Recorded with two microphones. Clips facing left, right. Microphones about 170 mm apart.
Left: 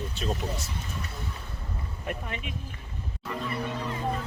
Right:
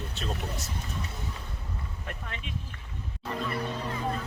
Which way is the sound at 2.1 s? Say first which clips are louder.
Left 7 dB; 15° left (ahead or behind).